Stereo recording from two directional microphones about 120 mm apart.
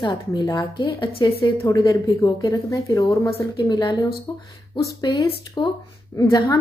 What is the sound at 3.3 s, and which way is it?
Speech, 40° left (ahead or behind).